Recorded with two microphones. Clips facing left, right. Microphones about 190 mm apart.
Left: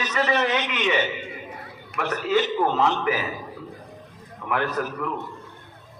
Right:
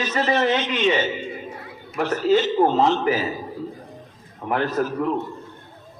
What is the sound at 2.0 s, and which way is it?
Speech, 35° right (ahead or behind).